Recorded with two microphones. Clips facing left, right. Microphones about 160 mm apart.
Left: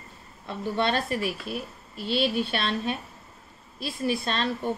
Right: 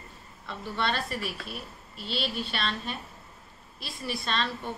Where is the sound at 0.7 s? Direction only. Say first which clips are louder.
Left 5 dB; 50° left (ahead or behind).